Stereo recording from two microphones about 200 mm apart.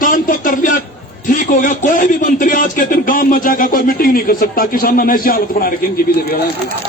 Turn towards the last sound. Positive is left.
turn(degrees=50)  # may be behind; listen again after turning